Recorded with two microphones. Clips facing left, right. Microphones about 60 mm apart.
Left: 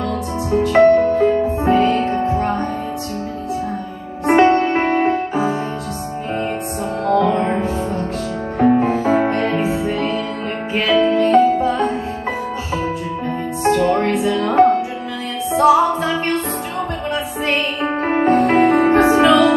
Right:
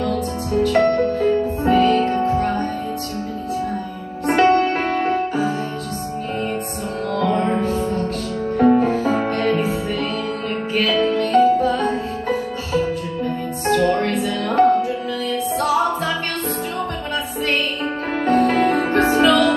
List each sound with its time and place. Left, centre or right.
0.5 s music: left
4.3 s music: left
7.1 s music: left
18.1 s music: left